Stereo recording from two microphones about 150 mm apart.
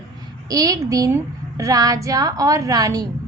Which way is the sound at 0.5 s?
25° right (ahead or behind).